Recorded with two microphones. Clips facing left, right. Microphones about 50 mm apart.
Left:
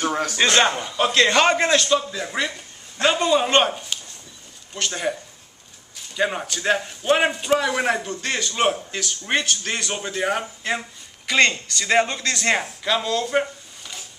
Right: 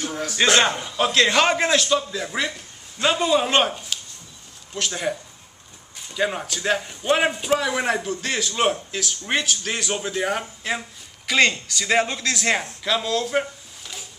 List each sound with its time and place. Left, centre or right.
0.0 s music: left
0.4 s a man's voice: centre
6.1 s a man's voice: centre